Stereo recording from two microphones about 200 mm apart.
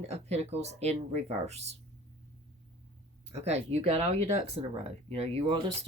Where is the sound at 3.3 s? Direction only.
35° right (ahead or behind).